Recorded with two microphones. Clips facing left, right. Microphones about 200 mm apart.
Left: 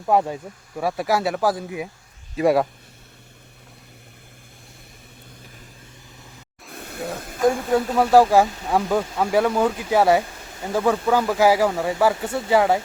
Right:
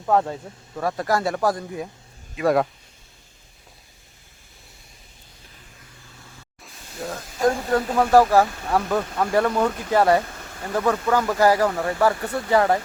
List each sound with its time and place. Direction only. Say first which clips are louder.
0.0 s speech: left 1 dB; 15° left (ahead or behind)
6.7 s a sound: left 7 dB; 60° left (ahead or behind)
7.4 s speech: left 1 dB; 10° left (ahead or behind)